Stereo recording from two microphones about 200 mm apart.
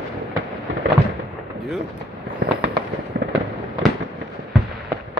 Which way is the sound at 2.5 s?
55° right (ahead or behind).